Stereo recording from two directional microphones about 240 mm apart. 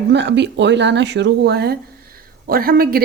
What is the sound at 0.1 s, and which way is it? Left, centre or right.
A woman's voice, right.